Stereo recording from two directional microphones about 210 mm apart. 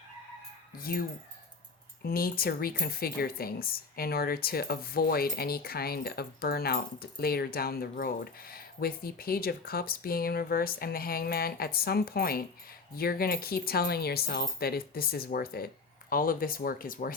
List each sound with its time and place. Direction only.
0.8 s speech: 45° left (ahead or behind)
2.0 s speech: 45° left (ahead or behind)